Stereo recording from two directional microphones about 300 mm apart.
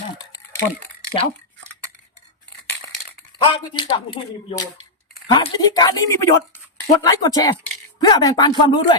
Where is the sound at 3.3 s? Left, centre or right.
Centre.